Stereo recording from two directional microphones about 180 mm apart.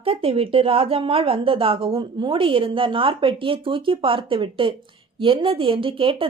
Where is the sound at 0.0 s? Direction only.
30° right (ahead or behind).